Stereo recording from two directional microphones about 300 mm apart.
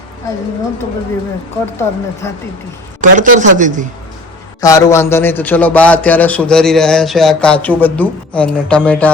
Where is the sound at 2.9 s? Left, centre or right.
Right.